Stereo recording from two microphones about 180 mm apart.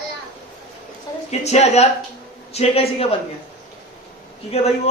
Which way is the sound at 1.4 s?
35° left (ahead or behind).